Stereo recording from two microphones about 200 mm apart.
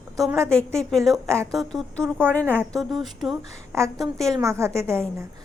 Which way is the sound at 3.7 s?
15° right (ahead or behind).